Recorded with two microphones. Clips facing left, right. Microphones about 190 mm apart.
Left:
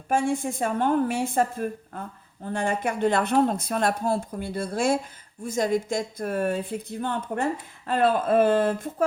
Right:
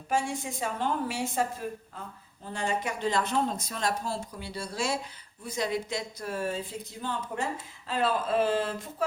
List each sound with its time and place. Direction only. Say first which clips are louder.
0.1 s a woman's voice: left 6 dB; 55° left (ahead or behind)